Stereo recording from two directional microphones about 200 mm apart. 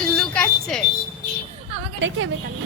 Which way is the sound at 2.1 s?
70° right (ahead or behind).